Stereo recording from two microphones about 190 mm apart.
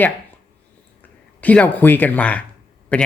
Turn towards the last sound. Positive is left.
turn(degrees=0)  # may be behind; listen again after turning